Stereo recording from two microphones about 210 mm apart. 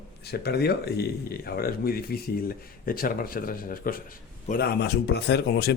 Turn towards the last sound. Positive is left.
turn(degrees=50)  # may be behind; listen again after turning